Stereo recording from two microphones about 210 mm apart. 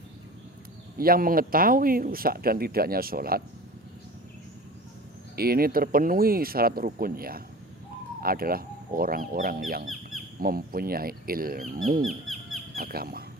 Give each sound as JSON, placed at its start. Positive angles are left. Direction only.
{"t": 0.9, "sound": "speech", "side_deg": -45}
{"t": 5.4, "sound": "speech", "side_deg": -45}
{"t": 12.0, "sound": "bird", "side_deg": 0}
{"t": 12.7, "sound": "speech", "side_deg": -45}